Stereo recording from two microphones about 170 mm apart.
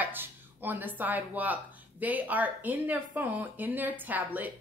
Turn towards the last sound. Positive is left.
turn(degrees=-10)  # may be behind; listen again after turning